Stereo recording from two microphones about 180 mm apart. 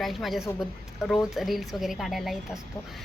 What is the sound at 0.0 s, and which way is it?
Speech, centre (ahead or behind).